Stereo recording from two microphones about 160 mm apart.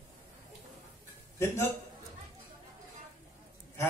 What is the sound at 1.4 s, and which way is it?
Speech, 15° left (ahead or behind).